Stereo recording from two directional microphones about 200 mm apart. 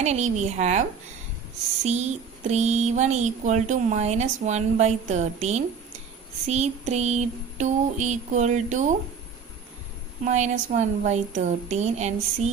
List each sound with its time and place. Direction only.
0.0 s speech: 35° right (ahead or behind)
10.2 s speech: 35° right (ahead or behind)